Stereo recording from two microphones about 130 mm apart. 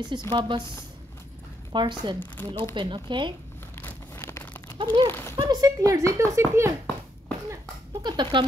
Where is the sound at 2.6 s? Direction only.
40° right (ahead or behind).